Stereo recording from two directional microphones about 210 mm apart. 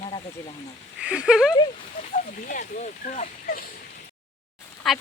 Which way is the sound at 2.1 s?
40° left (ahead or behind).